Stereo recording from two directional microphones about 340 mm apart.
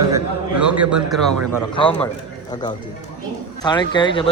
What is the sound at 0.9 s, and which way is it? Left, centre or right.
A man's voice, centre.